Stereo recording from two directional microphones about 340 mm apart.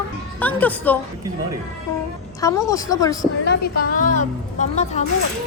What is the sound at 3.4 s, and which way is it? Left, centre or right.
A woman's voice, left.